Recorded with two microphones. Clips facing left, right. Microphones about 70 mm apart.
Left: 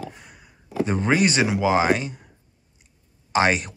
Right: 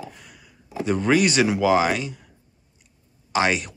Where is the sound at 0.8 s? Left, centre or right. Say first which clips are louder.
Right 1 dB; left.